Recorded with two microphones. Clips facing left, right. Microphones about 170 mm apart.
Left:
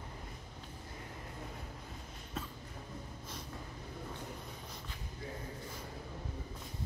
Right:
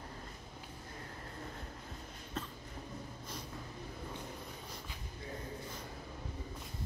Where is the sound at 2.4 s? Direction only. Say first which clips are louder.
Right 1 dB; 5° left (ahead or behind).